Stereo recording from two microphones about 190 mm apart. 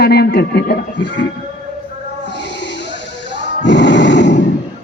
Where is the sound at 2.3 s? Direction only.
65° left (ahead or behind).